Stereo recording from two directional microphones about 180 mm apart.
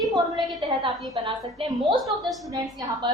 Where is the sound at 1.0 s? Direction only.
25° right (ahead or behind).